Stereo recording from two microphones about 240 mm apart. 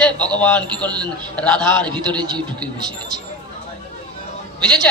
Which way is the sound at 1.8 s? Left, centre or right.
Centre.